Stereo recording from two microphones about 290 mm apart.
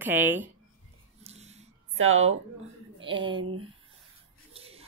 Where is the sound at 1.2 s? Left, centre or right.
Right.